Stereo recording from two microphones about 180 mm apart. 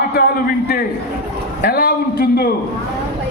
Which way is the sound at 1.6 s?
60° left (ahead or behind).